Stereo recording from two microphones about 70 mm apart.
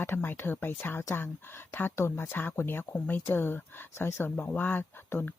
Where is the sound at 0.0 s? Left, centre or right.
Left.